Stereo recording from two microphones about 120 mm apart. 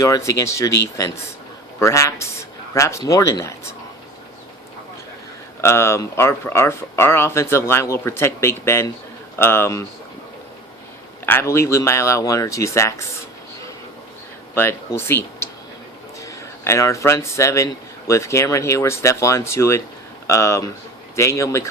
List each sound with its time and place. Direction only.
0.0 s speech: 25° left (ahead or behind)
5.6 s speech: 20° left (ahead or behind)
11.3 s speech: 20° left (ahead or behind)
14.5 s a man's voice: 20° left (ahead or behind)